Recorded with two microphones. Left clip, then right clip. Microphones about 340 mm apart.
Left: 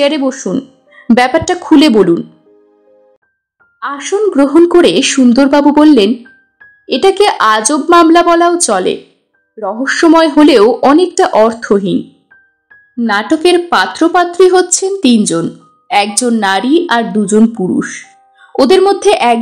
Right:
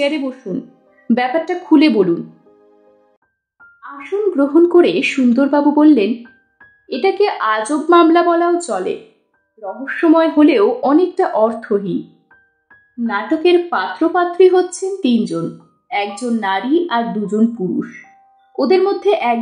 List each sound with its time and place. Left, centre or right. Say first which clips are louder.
0.0 s a woman's voice: left 7 dB; centre
3.8 s a woman's voice: left 6 dB; centre